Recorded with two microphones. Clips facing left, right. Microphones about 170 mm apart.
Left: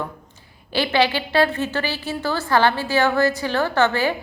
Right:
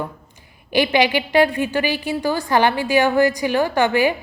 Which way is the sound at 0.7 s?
15° right (ahead or behind).